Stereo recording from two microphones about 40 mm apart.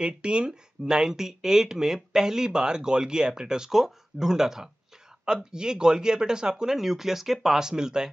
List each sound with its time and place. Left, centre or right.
0.0 s speech: right